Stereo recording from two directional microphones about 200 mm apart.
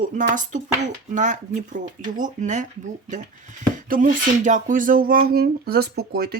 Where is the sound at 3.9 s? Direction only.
40° right (ahead or behind).